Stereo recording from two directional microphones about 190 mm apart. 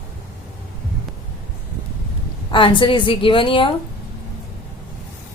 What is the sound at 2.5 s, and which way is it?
Music, 25° left (ahead or behind).